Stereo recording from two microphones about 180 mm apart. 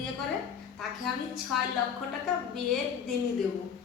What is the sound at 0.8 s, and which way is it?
Speech, centre (ahead or behind).